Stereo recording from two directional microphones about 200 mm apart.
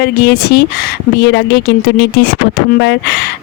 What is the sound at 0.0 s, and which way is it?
Speech, 55° left (ahead or behind).